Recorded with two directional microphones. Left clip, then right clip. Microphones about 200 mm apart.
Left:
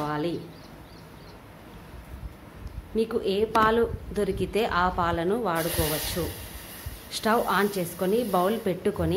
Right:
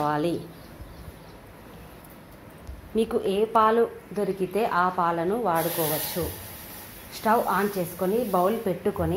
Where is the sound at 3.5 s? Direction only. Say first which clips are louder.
Right 2 dB; 20° left (ahead or behind).